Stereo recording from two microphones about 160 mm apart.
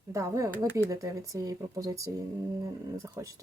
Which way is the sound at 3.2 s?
20° right (ahead or behind).